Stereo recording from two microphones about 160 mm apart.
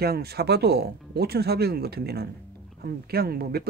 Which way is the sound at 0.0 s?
80° right.